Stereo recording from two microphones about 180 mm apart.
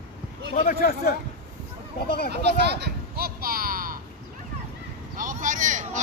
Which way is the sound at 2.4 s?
70° right (ahead or behind).